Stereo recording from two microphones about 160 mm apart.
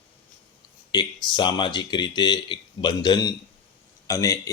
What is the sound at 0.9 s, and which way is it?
Speech, 30° left (ahead or behind).